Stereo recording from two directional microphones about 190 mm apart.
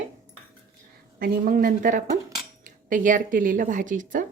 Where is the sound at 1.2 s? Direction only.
50° right (ahead or behind).